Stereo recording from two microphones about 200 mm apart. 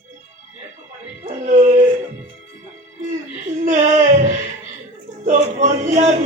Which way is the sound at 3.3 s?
40° right (ahead or behind).